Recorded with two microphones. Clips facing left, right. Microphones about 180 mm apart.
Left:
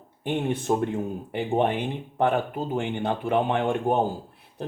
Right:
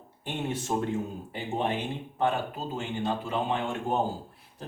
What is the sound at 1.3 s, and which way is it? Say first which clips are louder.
Speech: left 7 dB; 60° left (ahead or behind).